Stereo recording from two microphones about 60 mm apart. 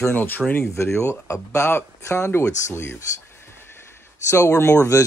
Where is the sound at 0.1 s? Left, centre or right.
Left.